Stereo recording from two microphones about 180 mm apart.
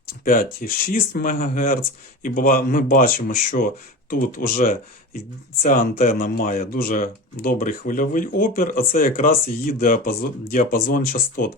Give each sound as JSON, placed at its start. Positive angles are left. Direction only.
{"t": 0.0, "sound": "speech", "side_deg": 50}